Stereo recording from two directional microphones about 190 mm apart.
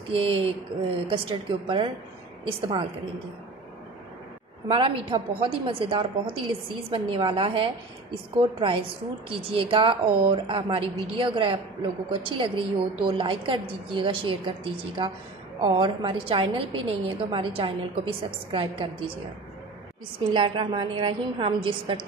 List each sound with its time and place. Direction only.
0.1 s a woman's voice: 30° right (ahead or behind)
4.6 s a woman's voice: 25° right (ahead or behind)
20.3 s a woman's voice: 25° right (ahead or behind)